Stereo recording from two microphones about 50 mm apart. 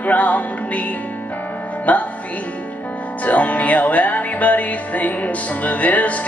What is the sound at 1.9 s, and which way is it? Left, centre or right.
Speech, left.